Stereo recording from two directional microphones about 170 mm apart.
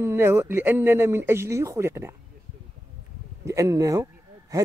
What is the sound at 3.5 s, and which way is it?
Speech, 20° right (ahead or behind).